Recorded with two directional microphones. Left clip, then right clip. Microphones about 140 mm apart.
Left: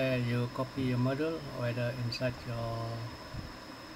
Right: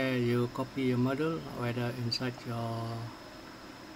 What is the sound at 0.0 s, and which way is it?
Speech, 45° right (ahead or behind).